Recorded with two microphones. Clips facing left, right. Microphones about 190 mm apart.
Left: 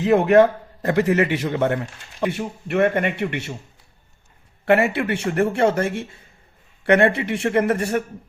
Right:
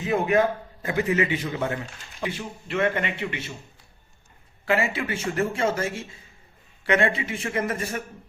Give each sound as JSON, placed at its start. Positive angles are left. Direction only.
{"t": 0.0, "sound": "a man's voice", "side_deg": 70}
{"t": 4.6, "sound": "a man's voice", "side_deg": 60}